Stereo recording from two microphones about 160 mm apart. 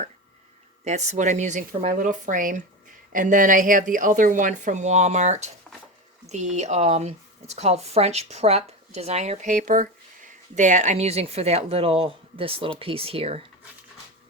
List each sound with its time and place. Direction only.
0.9 s speech: 45° right (ahead or behind)